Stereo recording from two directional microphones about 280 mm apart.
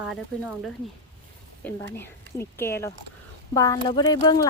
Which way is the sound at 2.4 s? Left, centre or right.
Centre.